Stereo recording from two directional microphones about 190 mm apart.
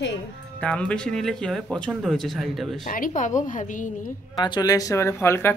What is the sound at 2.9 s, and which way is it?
A woman's voice, 45° left (ahead or behind).